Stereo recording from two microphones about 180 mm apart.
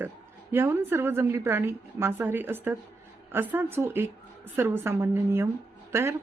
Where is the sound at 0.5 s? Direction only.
15° right (ahead or behind).